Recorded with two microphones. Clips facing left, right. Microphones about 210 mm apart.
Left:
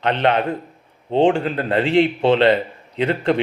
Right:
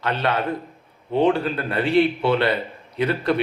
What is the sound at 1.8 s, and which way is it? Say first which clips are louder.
Speech: left 1 dB; 90° left.